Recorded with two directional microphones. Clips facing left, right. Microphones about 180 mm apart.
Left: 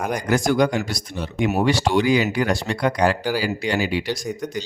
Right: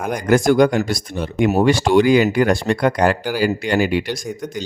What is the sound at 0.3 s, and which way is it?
Speech, 50° right (ahead or behind).